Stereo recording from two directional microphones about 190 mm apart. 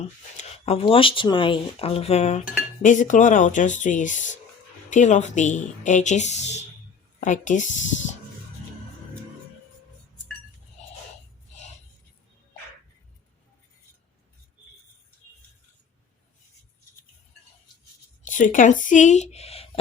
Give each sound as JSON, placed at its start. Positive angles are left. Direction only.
{"t": 0.0, "sound": "speech", "side_deg": 35}
{"t": 18.3, "sound": "speech", "side_deg": 45}